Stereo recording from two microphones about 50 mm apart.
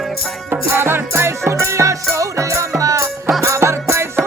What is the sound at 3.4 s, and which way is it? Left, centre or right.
Music, right.